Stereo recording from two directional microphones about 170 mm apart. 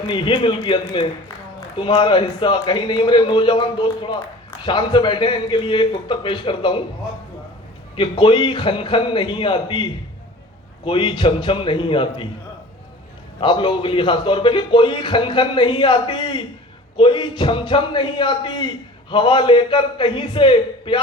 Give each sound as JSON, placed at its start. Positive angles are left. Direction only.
{"t": 0.1, "sound": "a man's voice", "side_deg": 30}
{"t": 7.9, "sound": "a man's voice", "side_deg": 30}
{"t": 13.4, "sound": "a man's voice", "side_deg": 30}